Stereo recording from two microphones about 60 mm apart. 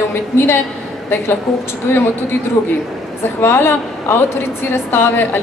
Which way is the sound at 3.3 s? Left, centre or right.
Left.